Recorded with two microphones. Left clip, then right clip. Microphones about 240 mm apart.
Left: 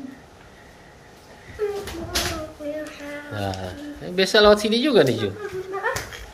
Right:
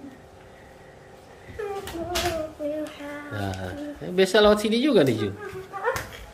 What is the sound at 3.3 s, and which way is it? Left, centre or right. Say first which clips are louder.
Speech: left 4 dB; centre.